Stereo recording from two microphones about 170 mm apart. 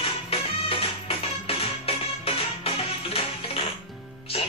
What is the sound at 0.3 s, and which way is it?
Music, 35° left (ahead or behind).